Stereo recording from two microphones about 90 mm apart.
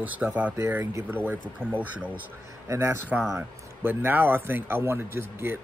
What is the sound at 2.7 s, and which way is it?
A man's voice, 30° right (ahead or behind).